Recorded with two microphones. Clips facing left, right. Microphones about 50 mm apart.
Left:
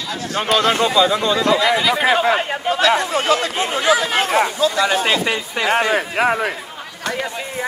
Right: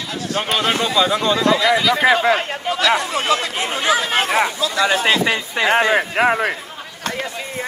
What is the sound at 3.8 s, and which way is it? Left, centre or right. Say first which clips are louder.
Speech: left 1 dB; right.